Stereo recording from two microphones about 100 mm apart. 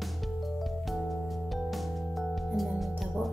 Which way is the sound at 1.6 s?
Centre (ahead or behind).